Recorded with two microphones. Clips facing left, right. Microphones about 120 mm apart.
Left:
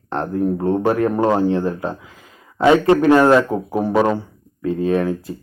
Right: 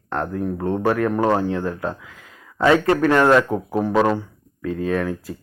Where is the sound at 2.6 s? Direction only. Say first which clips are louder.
Left 3 dB; 20° left (ahead or behind).